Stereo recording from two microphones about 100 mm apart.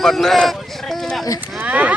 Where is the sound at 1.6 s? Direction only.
15° right (ahead or behind).